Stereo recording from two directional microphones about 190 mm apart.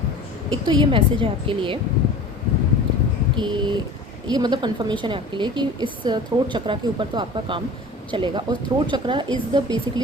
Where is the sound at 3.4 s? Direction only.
25° right (ahead or behind).